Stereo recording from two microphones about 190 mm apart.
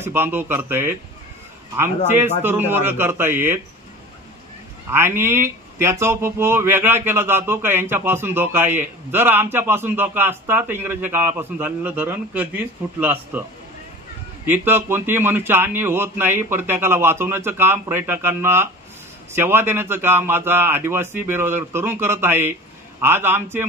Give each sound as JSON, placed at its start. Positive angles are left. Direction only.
{"t": 0.0, "sound": "speech", "side_deg": -10}
{"t": 4.9, "sound": "speech", "side_deg": -15}
{"t": 14.4, "sound": "speech", "side_deg": -10}